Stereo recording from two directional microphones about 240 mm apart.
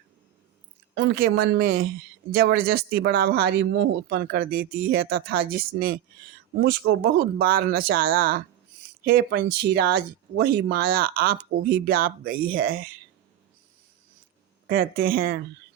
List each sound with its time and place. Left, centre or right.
0.9 s speech: right
14.7 s speech: right